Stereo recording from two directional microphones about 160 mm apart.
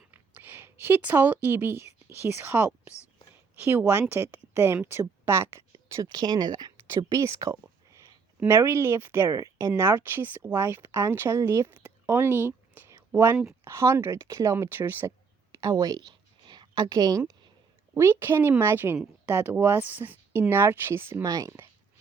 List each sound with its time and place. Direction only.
0.1 s a woman's voice: 10° right (ahead or behind)
15.5 s a sound: 20° right (ahead or behind)
17.9 s speech: 15° right (ahead or behind)